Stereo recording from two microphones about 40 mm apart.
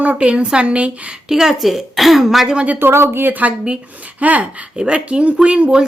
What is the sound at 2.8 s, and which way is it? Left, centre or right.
Speech, right.